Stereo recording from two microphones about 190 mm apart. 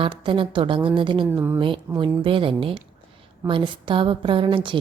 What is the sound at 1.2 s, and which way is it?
Speech, 10° right (ahead or behind).